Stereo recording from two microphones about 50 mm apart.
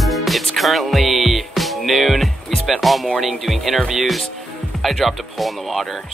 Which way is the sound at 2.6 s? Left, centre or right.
Centre.